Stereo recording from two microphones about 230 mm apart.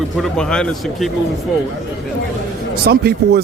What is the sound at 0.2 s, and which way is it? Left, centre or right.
Speech, centre.